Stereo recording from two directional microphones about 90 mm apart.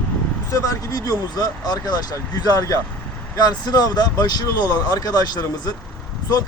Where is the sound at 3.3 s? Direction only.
50° left (ahead or behind).